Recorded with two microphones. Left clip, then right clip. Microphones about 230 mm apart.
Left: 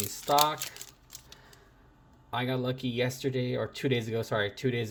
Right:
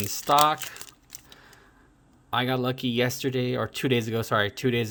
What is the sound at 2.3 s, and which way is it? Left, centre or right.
Speech, right.